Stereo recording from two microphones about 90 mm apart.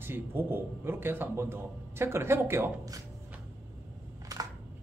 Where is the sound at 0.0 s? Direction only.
25° right (ahead or behind).